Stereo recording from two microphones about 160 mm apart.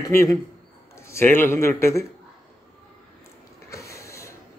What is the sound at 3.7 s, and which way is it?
Printer, 20° left (ahead or behind).